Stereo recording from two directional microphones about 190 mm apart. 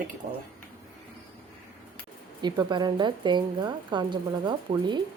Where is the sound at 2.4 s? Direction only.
20° right (ahead or behind).